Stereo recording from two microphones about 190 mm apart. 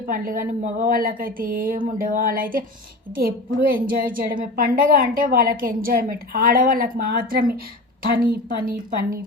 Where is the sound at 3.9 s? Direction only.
45° right (ahead or behind).